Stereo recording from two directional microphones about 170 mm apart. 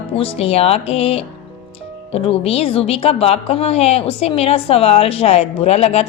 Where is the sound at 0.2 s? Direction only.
35° left (ahead or behind).